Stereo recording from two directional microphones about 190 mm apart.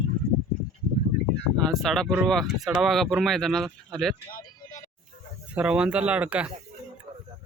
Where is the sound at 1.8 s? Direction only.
Centre (ahead or behind).